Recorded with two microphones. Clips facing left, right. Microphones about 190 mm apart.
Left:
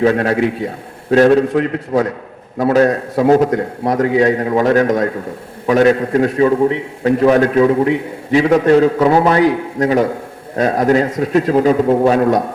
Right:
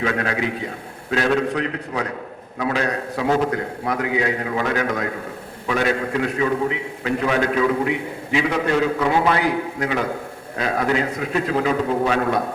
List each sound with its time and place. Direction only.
0.0 s a man's voice: 40° left (ahead or behind)